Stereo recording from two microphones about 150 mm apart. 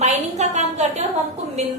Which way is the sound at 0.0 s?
50° right (ahead or behind).